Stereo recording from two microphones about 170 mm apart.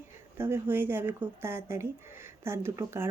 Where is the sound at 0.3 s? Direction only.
15° right (ahead or behind).